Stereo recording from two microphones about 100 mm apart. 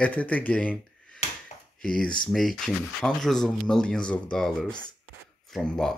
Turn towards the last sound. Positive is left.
turn(degrees=5)  # may be behind; listen again after turning